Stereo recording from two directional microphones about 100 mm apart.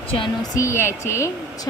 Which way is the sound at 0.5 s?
25° left (ahead or behind).